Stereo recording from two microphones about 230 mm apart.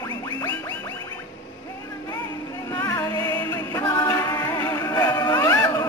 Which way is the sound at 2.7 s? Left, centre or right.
Centre.